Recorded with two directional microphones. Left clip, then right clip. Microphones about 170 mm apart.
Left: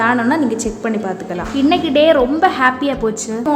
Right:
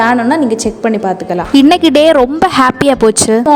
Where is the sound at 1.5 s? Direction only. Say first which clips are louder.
Right 7 dB; 90° right.